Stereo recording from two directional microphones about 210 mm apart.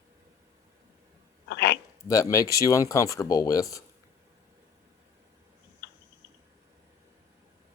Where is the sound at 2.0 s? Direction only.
15° left (ahead or behind).